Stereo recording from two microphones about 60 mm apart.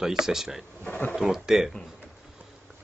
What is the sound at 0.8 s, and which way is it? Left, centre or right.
Speech, left.